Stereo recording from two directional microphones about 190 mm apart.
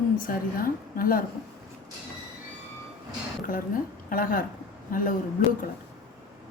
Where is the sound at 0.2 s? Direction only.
50° left (ahead or behind).